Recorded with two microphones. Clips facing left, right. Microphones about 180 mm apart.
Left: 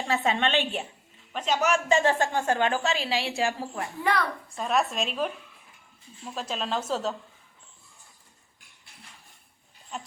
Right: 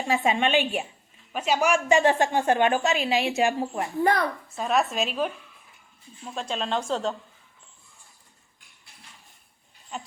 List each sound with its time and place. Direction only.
0.1 s a woman's voice: 15° right (ahead or behind)
4.0 s a woman's voice: 45° right (ahead or behind)
4.4 s a woman's voice: centre (ahead or behind)
9.9 s a woman's voice: centre (ahead or behind)